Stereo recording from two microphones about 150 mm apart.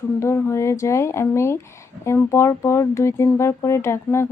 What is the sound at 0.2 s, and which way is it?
Speech, 15° left (ahead or behind).